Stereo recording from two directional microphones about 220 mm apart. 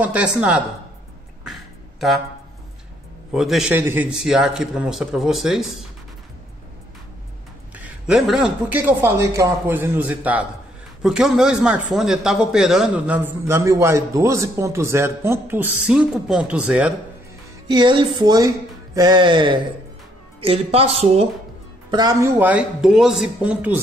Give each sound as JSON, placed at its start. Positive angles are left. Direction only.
{"t": 0.0, "sound": "a man's voice", "side_deg": -5}
{"t": 1.4, "sound": "beatboxing", "side_deg": 0}
{"t": 3.3, "sound": "a man's voice", "side_deg": 0}
{"t": 7.7, "sound": "a man's voice", "side_deg": -5}
{"t": 17.6, "sound": "speech", "side_deg": -20}
{"t": 21.9, "sound": "a man's voice", "side_deg": -15}